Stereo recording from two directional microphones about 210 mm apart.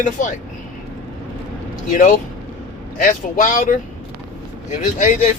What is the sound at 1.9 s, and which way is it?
Speech, 40° left (ahead or behind).